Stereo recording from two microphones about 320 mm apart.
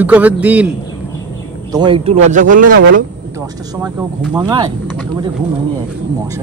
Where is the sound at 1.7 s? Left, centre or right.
Centre.